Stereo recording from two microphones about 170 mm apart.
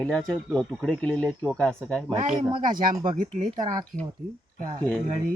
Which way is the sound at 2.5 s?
25° right (ahead or behind).